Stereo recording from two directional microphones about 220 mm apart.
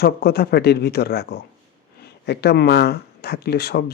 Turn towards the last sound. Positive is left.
turn(degrees=45)  # may be behind; listen again after turning